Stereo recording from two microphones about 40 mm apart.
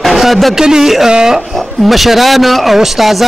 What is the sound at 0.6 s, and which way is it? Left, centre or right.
Speech, centre.